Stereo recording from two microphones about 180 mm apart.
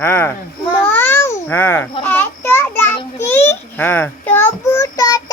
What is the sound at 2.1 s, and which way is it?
Child singing, 10° left (ahead or behind).